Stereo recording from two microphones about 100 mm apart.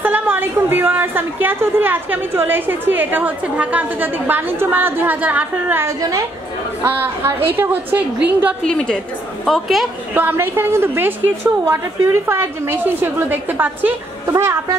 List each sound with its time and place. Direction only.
0.0 s a woman's voice: 20° right (ahead or behind)
5.9 s a woman's voice: 35° right (ahead or behind)
6.8 s a woman's voice: 25° right (ahead or behind)
9.4 s a woman's voice: centre (ahead or behind)
10.1 s a woman's voice: 20° right (ahead or behind)